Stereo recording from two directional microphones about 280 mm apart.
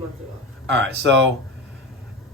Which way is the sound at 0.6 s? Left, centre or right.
Right.